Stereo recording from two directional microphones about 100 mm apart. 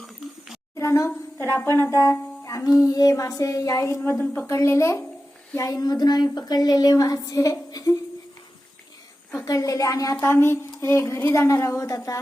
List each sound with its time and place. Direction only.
0.8 s a sound: 30° left (ahead or behind)
1.5 s a woman's voice: 25° left (ahead or behind)
9.3 s a woman's voice: 30° left (ahead or behind)